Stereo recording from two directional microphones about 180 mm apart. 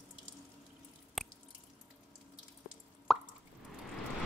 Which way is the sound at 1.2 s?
Centre (ahead or behind).